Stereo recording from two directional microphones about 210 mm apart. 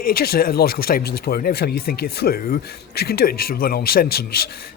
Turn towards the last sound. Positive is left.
turn(degrees=45)  # may be behind; listen again after turning